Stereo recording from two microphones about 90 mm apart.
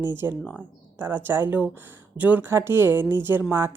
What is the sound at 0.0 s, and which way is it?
Speech, 25° right (ahead or behind).